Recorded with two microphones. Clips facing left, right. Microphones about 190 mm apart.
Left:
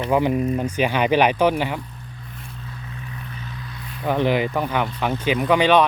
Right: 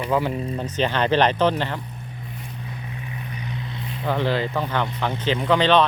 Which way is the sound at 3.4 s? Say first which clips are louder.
Right 4 dB; 20° right (ahead or behind).